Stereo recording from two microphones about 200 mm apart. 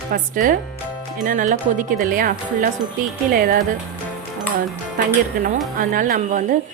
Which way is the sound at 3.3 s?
45° right (ahead or behind).